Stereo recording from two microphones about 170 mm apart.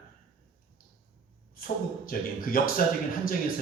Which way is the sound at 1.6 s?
60° left (ahead or behind).